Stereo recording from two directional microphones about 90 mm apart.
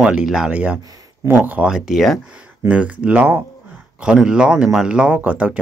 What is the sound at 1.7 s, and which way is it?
Speech, centre (ahead or behind).